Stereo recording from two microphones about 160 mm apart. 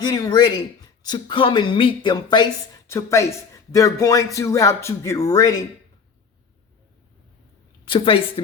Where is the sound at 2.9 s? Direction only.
20° left (ahead or behind).